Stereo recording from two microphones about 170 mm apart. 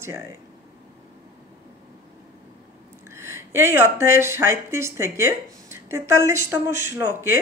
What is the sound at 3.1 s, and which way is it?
Speech, 15° right (ahead or behind).